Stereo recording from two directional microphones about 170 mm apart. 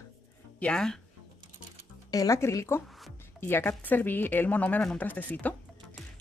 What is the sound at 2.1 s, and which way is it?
Speech, 20° left (ahead or behind).